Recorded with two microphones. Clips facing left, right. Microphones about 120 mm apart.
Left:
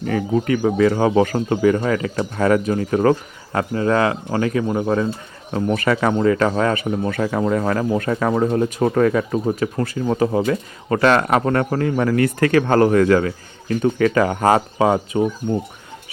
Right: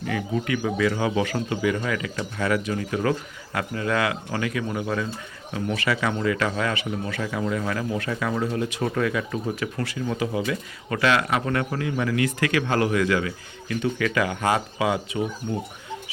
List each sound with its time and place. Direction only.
0.0 s speech: 40° left (ahead or behind)